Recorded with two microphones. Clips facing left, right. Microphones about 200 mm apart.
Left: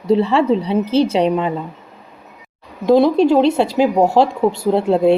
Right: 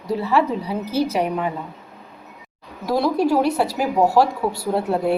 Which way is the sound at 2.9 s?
25° left (ahead or behind).